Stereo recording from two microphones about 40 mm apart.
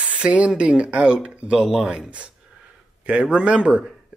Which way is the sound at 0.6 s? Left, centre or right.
Right.